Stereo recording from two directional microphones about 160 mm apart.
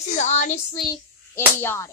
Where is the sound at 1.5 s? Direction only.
15° left (ahead or behind).